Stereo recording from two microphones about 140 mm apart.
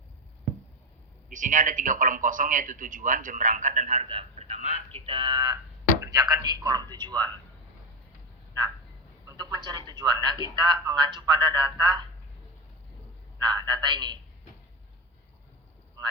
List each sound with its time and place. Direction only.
1.3 s a man's voice: 65° right (ahead or behind)
4.0 s speech: 45° right (ahead or behind)
9.2 s speech: 30° right (ahead or behind)
13.4 s speech: 30° right (ahead or behind)